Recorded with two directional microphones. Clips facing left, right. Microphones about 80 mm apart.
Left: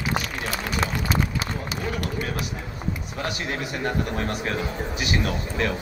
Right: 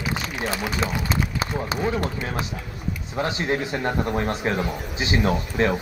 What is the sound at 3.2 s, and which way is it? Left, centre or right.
A man's voice, right.